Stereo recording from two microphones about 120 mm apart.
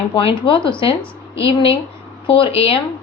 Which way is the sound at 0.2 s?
50° left (ahead or behind).